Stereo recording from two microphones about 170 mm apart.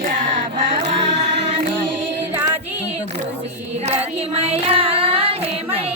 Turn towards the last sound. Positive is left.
turn(degrees=-35)  # may be behind; listen again after turning